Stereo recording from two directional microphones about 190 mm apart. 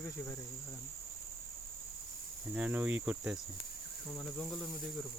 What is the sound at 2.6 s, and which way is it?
Cricket, 5° right (ahead or behind).